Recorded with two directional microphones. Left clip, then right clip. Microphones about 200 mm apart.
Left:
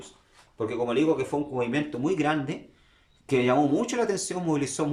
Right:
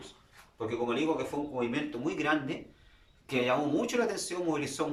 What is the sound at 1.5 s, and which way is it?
Speech, 40° left (ahead or behind).